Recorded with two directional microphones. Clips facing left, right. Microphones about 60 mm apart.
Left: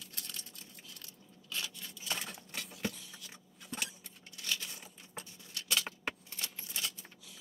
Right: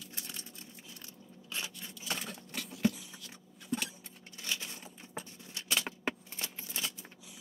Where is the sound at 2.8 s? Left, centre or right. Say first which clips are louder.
Right 10 dB; centre.